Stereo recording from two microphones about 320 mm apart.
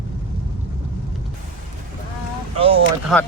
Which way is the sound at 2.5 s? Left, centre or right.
Centre.